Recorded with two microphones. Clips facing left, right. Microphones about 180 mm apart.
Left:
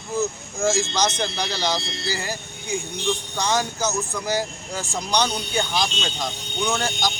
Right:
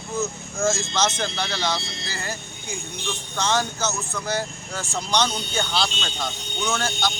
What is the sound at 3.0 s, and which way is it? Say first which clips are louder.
Speech: left 1 dB; 15° left (ahead or behind).